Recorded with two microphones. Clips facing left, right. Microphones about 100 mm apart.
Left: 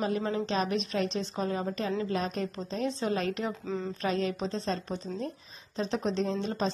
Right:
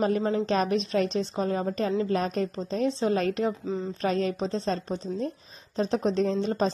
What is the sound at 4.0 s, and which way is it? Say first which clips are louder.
A woman's voice: right 4 dB; 40° right (ahead or behind).